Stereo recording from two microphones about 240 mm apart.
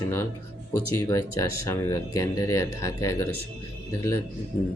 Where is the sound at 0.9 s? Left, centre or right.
Centre.